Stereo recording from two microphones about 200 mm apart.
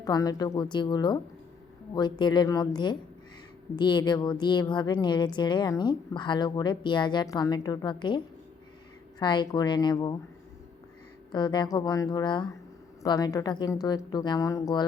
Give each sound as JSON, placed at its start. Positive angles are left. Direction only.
{"t": 0.0, "sound": "speech", "side_deg": 20}
{"t": 11.3, "sound": "speech", "side_deg": 20}